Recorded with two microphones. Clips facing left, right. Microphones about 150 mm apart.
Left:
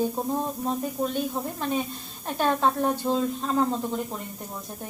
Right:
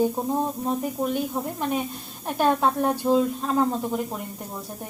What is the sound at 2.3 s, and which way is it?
Speech, 10° right (ahead or behind).